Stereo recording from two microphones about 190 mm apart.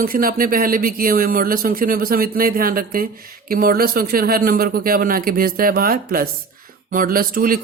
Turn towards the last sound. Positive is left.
turn(degrees=-50)  # may be behind; listen again after turning